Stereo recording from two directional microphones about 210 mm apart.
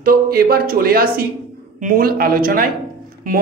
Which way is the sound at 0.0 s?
45° right (ahead or behind).